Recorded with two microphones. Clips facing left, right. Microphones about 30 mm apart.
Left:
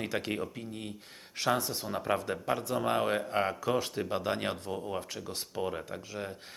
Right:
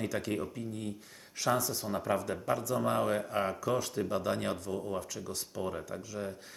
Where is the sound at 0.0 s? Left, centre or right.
Left.